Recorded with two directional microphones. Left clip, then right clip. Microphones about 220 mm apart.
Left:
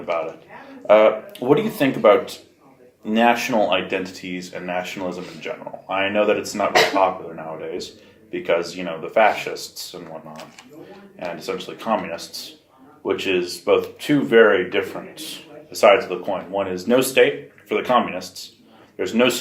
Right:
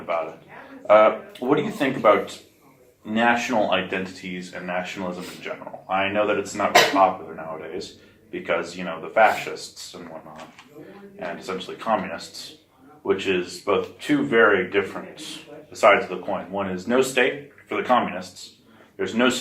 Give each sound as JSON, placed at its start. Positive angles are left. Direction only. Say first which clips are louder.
{"t": 0.9, "sound": "speech", "louder": "left 2 dB", "side_deg": 40}
{"t": 5.9, "sound": "speech", "louder": "left 3 dB", "side_deg": 40}
{"t": 8.3, "sound": "speech", "louder": "left 4 dB", "side_deg": 40}
{"t": 11.2, "sound": "speech", "louder": "left 3 dB", "side_deg": 40}